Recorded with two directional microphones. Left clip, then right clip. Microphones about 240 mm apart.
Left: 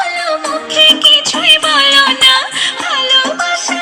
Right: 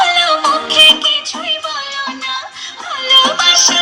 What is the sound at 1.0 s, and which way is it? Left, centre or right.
Music, left.